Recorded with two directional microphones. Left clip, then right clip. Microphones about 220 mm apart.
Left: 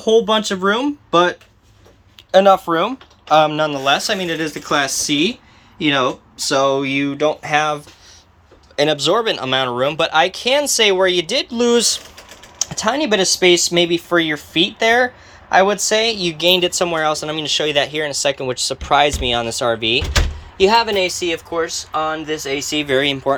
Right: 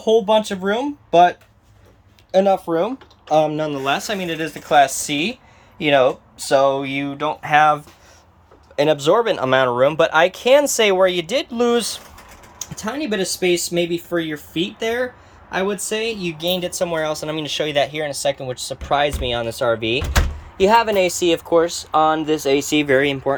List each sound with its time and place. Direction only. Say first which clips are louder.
0.0 s speech: left 1 dB; 5° right (ahead or behind)
2.6 s speech: left 2 dB; 35° left (ahead or behind)
3.5 s speech: left 4 dB; 5° right (ahead or behind)
12.7 s speech: left 7 dB; 5° left (ahead or behind)
13.3 s speech: left 5 dB; 50° left (ahead or behind)
14.5 s speech: left 8 dB; centre (ahead or behind); by 21.1 s 20° right (ahead or behind)
21.2 s speech: right 4 dB; 30° right (ahead or behind)
23.0 s speech: left 1 dB; 15° right (ahead or behind)